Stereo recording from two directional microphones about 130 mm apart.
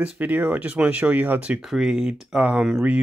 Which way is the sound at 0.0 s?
10° right (ahead or behind).